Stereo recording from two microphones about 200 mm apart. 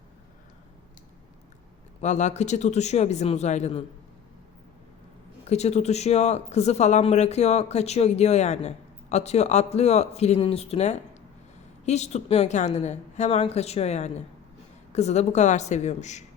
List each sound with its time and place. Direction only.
2.0 s speech: 35° left (ahead or behind)
5.5 s speech: 35° left (ahead or behind)